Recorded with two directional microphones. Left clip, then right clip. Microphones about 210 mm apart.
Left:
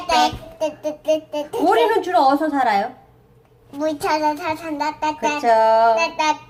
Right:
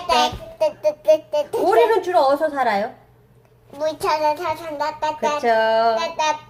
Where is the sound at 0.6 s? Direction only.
15° right (ahead or behind).